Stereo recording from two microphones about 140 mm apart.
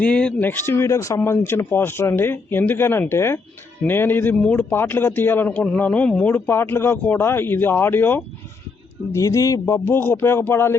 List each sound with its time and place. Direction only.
0.0 s speech: 5° left (ahead or behind)